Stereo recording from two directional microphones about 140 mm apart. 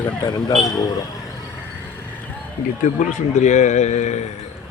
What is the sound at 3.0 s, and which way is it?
A man's voice, 60° left (ahead or behind).